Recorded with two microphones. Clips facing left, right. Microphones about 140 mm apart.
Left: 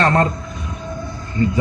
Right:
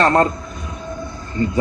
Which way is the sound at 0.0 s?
30° right (ahead or behind).